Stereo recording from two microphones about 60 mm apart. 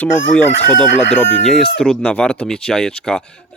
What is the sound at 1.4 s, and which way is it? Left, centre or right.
Speech, centre.